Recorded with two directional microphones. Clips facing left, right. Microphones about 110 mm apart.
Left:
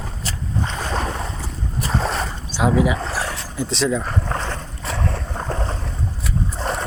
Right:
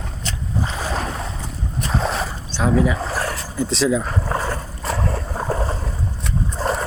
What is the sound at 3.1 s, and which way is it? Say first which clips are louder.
Vehicle: right 2 dB; centre (ahead or behind).